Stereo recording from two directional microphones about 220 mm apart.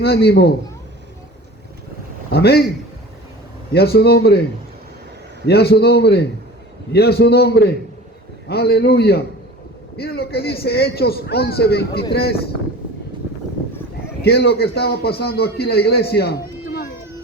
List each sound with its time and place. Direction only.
0.0 s a man's voice: 45° left (ahead or behind)
2.3 s a man's voice: 45° left (ahead or behind)
3.7 s a man's voice: 45° left (ahead or behind)
5.5 s a man's voice: 45° left (ahead or behind)
14.2 s a man's voice: 50° left (ahead or behind)